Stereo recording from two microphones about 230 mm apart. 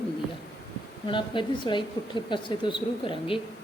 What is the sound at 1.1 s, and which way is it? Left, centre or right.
Speech, left.